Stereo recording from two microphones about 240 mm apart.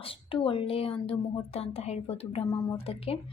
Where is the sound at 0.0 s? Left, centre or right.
Left.